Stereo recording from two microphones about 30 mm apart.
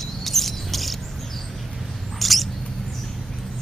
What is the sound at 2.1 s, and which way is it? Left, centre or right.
Rodents, centre.